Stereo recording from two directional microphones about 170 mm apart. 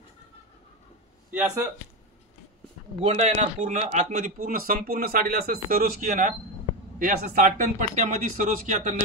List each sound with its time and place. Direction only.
1.3 s speech: 10° right (ahead or behind)
3.0 s a man's voice: 40° right (ahead or behind)